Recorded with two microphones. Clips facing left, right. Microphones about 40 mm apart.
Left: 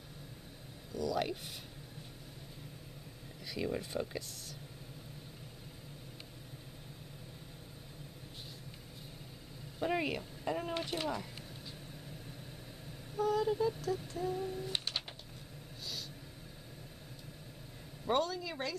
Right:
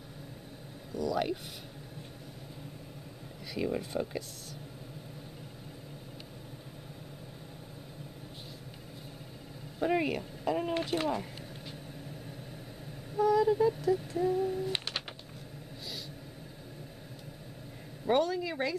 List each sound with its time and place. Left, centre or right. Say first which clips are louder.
0.9 s speech: right 4 dB; centre
3.5 s speech: right 4 dB; centre
9.8 s speech: right 5 dB; centre
11.0 s speech: right 5 dB; right
13.1 s vehicle: right 6 dB; centre
13.6 s speech: right 7 dB; centre
18.0 s speech: right 5 dB; right